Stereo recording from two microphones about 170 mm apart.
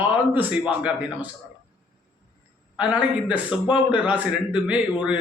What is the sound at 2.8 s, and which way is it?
A man's voice, 10° right (ahead or behind).